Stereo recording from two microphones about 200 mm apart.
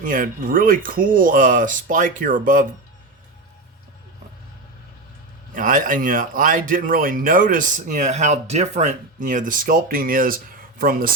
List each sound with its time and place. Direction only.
0.0 s speech: 45° right (ahead or behind)
5.5 s speech: 40° right (ahead or behind)